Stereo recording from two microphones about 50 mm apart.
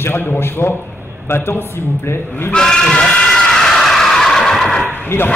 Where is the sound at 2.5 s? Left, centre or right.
Centre.